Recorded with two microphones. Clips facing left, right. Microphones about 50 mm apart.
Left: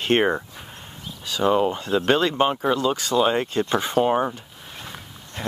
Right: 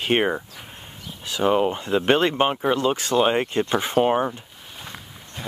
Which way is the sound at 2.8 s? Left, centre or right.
Right.